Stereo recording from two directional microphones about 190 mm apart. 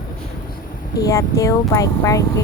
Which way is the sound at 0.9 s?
20° left (ahead or behind).